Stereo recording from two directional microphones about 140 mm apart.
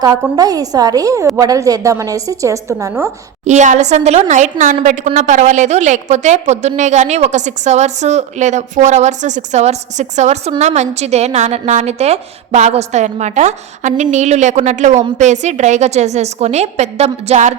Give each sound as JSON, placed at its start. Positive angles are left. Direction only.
{"t": 0.2, "sound": "a woman's voice", "side_deg": -25}
{"t": 3.4, "sound": "a woman's voice", "side_deg": -55}